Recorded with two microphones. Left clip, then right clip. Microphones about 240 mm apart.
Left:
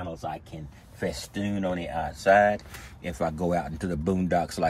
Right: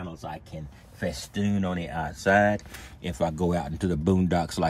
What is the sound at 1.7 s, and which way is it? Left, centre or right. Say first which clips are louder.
Speech: left 1 dB; right.